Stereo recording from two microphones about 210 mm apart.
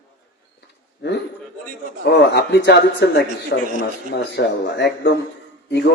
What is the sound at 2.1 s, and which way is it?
A man's voice, 55° left (ahead or behind).